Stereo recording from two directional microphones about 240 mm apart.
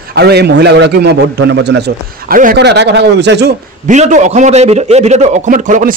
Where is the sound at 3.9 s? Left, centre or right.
Right.